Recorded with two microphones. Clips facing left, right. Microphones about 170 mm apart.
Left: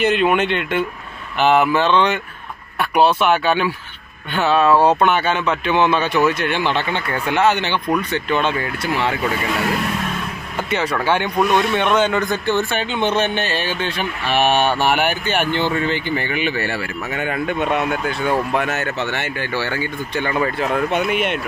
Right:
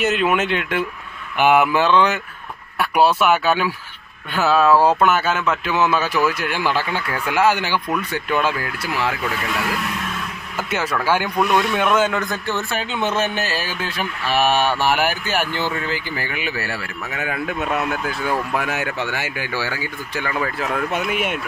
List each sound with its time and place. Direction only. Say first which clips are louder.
0.0 s speech: left 2 dB; 5° right (ahead or behind)
10.7 s speech: left 1 dB; 5° right (ahead or behind)